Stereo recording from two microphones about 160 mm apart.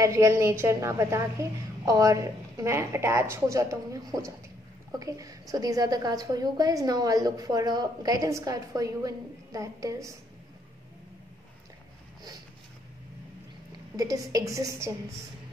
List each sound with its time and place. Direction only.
0.0 s a woman's voice: 20° right (ahead or behind)
13.9 s a woman's voice: 20° right (ahead or behind)